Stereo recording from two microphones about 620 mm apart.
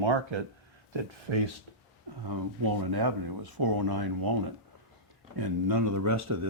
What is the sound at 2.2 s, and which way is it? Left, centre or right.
Speech, right.